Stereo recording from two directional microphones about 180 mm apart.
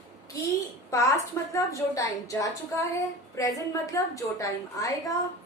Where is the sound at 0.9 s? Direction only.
15° left (ahead or behind).